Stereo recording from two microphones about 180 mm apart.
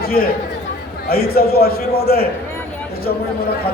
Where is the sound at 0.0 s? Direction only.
55° left (ahead or behind).